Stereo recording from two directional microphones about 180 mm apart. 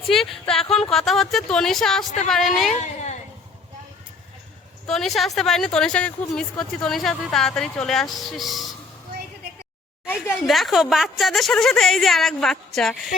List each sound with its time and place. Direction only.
0.1 s speech: centre (ahead or behind)
2.7 s a sound: 40° left (ahead or behind)
4.9 s speech: centre (ahead or behind)
10.4 s speech: centre (ahead or behind)